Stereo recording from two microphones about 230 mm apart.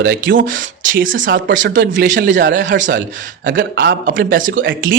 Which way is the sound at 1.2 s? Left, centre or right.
Right.